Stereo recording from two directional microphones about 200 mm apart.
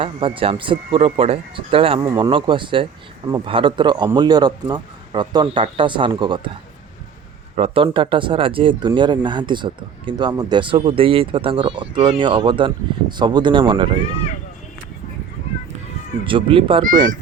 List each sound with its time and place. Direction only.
0.0 s speech: 25° right (ahead or behind)
2.0 s speech: 15° right (ahead or behind)
7.5 s speech: 30° right (ahead or behind)
16.2 s speech: 25° right (ahead or behind)